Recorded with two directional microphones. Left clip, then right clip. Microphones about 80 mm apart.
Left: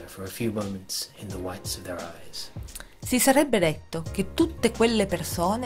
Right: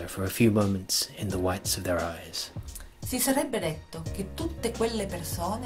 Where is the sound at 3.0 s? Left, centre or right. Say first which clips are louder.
Left 7 dB; left.